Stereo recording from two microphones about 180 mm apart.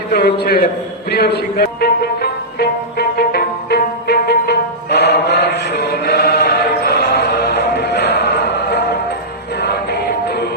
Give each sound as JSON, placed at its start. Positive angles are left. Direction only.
{"t": 0.1, "sound": "a man's voice", "side_deg": 60}
{"t": 1.1, "sound": "music", "side_deg": 65}